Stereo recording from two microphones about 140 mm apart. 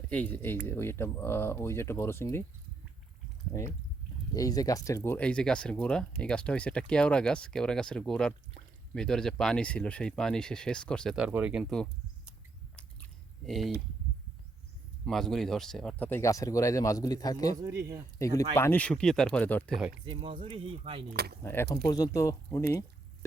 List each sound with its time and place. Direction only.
0.1 s speech: 10° left (ahead or behind)
3.5 s speech: 20° left (ahead or behind)
11.2 s speech: 10° right (ahead or behind)
11.6 s speech: 5° left (ahead or behind)
13.4 s speech: centre (ahead or behind)
15.0 s speech: 5° left (ahead or behind)
16.0 s speech: 20° left (ahead or behind)
17.6 s speech: 20° right (ahead or behind)
18.2 s speech: 25° left (ahead or behind)
20.2 s speech: 40° right (ahead or behind)
21.4 s speech: 15° left (ahead or behind)
21.8 s speech: 25° left (ahead or behind)